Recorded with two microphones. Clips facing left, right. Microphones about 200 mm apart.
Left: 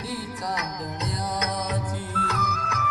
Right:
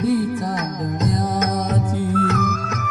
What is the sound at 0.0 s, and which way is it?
Music, 50° right (ahead or behind).